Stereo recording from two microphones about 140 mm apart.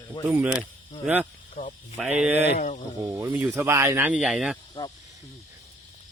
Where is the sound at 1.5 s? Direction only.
60° left (ahead or behind).